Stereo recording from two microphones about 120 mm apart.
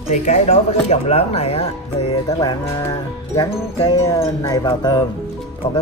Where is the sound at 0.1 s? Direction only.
70° left (ahead or behind).